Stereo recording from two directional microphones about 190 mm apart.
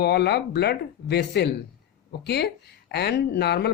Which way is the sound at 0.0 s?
55° left (ahead or behind).